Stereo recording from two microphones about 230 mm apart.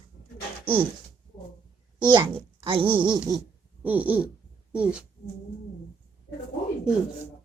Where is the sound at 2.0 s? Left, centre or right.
Right.